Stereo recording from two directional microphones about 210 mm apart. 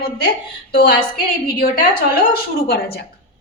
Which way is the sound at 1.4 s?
45° left (ahead or behind).